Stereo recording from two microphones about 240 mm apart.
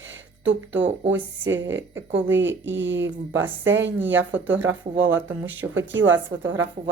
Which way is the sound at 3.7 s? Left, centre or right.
Right.